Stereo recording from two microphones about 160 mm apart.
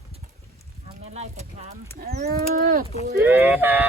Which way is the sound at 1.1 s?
45° right (ahead or behind).